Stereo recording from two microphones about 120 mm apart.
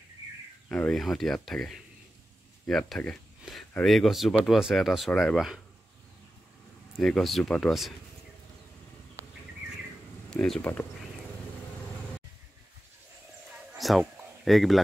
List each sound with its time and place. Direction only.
0.7 s speech: 5° left (ahead or behind)
7.0 s speech: 5° left (ahead or behind)
10.3 s speech: 5° left (ahead or behind)
10.6 s speech: 15° left (ahead or behind)
13.7 s a sound: centre (ahead or behind)